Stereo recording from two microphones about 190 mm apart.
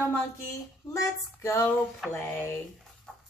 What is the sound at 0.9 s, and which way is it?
Speech, 15° left (ahead or behind).